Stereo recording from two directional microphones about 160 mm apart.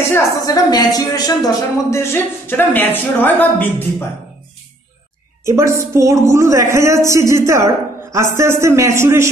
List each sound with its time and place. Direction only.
0.1 s a woman's voice: 25° left (ahead or behind)
5.4 s a woman's voice: 15° right (ahead or behind)